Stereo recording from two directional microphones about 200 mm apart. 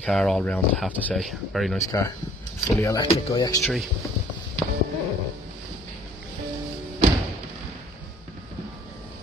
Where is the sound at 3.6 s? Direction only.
Centre (ahead or behind).